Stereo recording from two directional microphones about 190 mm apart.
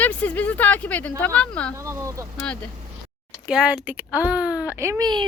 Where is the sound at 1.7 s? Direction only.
15° right (ahead or behind).